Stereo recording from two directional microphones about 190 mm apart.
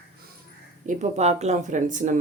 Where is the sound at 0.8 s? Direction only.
40° right (ahead or behind).